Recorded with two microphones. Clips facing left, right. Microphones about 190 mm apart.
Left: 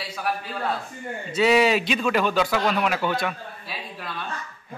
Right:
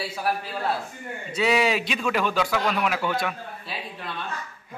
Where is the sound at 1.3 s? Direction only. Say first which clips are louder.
Left 4 dB; centre (ahead or behind).